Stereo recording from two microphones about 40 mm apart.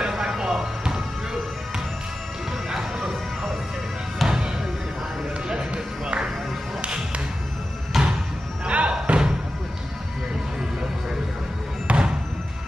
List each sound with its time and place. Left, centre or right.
0.0 s music: centre
4.2 s music: centre
7.9 s a sound: centre
8.6 s music: right
11.9 s music: right